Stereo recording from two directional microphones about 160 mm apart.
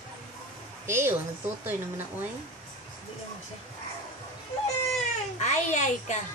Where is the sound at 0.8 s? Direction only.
15° right (ahead or behind).